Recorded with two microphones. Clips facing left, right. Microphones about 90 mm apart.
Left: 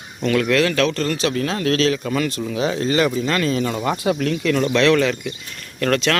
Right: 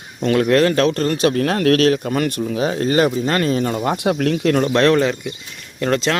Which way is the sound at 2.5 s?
40° right (ahead or behind).